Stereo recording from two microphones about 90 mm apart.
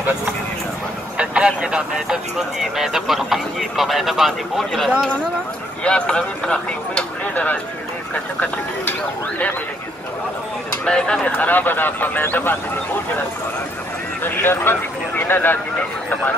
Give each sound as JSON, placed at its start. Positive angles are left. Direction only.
{"t": 1.1, "sound": "speech", "side_deg": -10}
{"t": 10.9, "sound": "speech", "side_deg": 10}
{"t": 14.2, "sound": "speech", "side_deg": 25}